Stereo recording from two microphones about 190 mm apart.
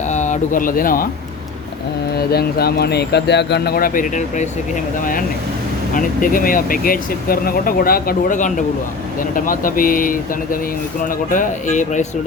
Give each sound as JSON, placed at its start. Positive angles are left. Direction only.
{"t": 0.1, "sound": "speech", "side_deg": 40}
{"t": 2.1, "sound": "speech", "side_deg": 55}
{"t": 5.9, "sound": "speech", "side_deg": 45}